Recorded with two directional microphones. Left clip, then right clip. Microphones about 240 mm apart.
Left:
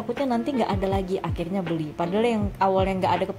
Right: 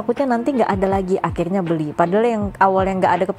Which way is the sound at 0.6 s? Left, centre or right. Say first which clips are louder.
Right 7 dB; right.